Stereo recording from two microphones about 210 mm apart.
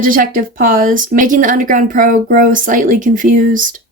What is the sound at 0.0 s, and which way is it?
A woman's voice, 40° right (ahead or behind).